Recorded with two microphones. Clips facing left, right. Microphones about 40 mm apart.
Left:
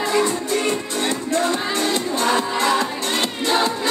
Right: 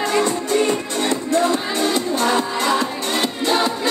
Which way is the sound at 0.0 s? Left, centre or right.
Right.